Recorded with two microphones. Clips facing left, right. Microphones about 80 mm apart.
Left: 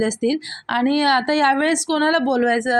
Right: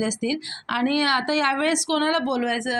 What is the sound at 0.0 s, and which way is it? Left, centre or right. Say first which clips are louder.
A woman's voice: left 5 dB; left.